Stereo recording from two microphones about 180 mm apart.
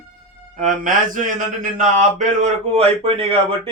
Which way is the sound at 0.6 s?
45° right (ahead or behind).